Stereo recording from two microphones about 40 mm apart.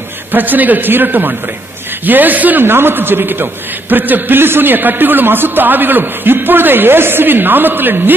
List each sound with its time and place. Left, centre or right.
0.3 s a man's voice: right
2.6 s a man's voice: right
3.9 s a man's voice: right
4.4 s a man's voice: right